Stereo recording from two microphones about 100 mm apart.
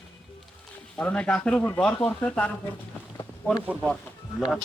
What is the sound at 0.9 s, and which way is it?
Speech, 10° left (ahead or behind).